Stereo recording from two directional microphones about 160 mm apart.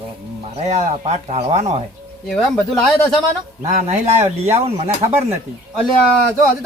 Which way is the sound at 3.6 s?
45° right (ahead or behind).